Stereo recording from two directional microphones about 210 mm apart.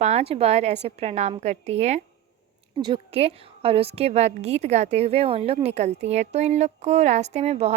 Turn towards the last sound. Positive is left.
turn(degrees=-30)  # may be behind; listen again after turning